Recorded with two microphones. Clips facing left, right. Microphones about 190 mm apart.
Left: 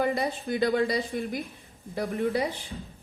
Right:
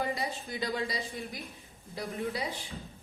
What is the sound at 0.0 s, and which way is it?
A woman's voice, 60° left (ahead or behind).